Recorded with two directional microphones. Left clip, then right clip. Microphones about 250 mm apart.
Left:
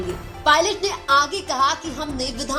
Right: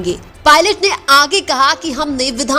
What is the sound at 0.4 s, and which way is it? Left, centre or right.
A woman's voice, right.